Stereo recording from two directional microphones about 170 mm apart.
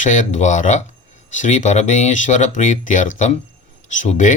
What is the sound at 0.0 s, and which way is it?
Speech, 50° left (ahead or behind).